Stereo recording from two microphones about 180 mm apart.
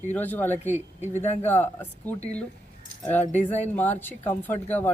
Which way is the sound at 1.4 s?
10° left (ahead or behind).